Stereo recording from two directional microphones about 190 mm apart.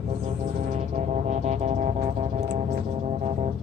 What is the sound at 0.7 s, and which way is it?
Music, 40° right (ahead or behind).